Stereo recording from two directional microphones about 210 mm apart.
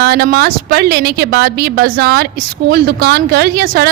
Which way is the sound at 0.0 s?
45° right (ahead or behind).